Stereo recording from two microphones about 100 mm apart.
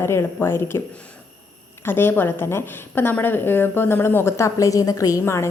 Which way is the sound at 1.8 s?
25° left (ahead or behind).